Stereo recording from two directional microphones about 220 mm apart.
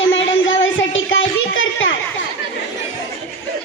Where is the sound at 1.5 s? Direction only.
60° left (ahead or behind).